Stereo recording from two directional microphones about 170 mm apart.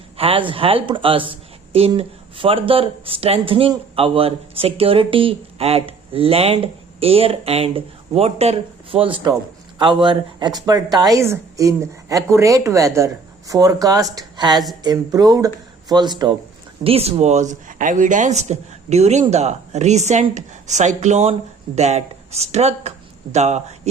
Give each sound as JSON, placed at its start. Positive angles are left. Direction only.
{"t": 0.2, "sound": "speech", "side_deg": -30}
{"t": 16.8, "sound": "speech", "side_deg": -35}